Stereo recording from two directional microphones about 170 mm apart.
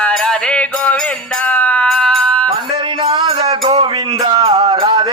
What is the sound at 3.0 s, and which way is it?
Music, 30° right (ahead or behind).